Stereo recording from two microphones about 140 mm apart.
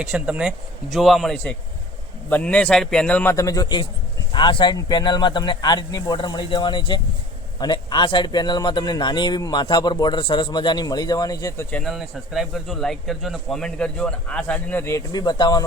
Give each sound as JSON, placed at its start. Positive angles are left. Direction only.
{"t": 0.0, "sound": "a man's voice", "side_deg": -5}
{"t": 3.3, "sound": "a man's voice", "side_deg": 25}
{"t": 11.7, "sound": "speech", "side_deg": 0}